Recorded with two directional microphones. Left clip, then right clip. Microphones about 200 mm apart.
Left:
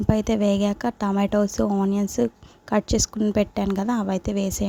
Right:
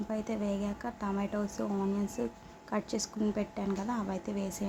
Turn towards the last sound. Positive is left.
turn(degrees=40)  # may be behind; listen again after turning